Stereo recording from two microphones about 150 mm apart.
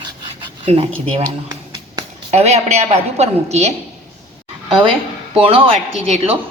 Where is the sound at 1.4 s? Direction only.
30° right (ahead or behind).